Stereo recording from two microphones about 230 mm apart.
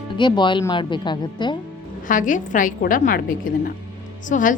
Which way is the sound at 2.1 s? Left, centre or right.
Left.